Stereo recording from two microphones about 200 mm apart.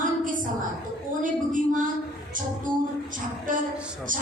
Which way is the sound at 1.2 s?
40° right (ahead or behind).